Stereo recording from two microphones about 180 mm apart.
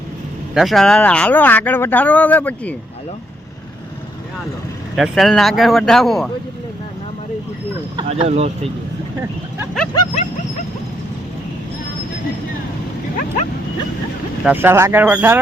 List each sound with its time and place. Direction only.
0.5 s speech: centre (ahead or behind)
4.9 s speech: centre (ahead or behind)
8.0 s speech: 35° right (ahead or behind)
13.1 s speech: 40° left (ahead or behind)
14.4 s speech: 10° right (ahead or behind)